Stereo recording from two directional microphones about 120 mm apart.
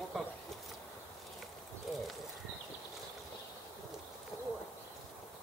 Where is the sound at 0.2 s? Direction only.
Centre (ahead or behind).